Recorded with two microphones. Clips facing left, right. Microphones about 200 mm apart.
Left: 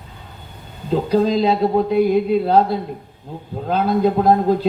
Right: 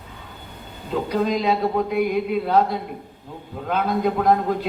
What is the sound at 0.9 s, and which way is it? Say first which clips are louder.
Speech: left 5 dB; 30° left (ahead or behind).